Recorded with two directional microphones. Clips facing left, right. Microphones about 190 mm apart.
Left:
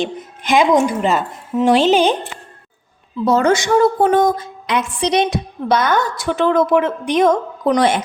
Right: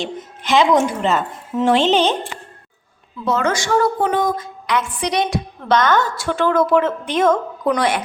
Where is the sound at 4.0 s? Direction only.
45° left (ahead or behind).